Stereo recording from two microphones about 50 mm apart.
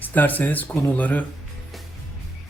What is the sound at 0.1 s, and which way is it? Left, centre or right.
Speech, left.